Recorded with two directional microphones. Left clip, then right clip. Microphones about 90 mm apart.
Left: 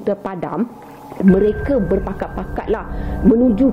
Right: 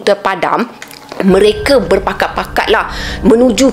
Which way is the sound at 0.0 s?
25° right (ahead or behind).